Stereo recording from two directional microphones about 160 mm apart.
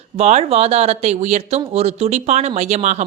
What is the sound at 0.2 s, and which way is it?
Speech, 40° right (ahead or behind).